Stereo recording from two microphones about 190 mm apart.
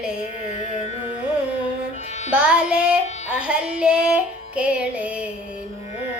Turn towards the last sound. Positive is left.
turn(degrees=-5)  # may be behind; listen again after turning